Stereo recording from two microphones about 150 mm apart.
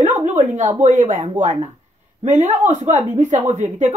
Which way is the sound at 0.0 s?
55° right (ahead or behind).